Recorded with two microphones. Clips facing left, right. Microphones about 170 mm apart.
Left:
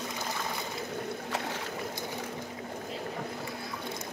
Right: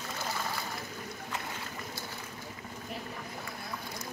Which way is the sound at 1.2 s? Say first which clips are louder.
Left 5 dB; 80° left.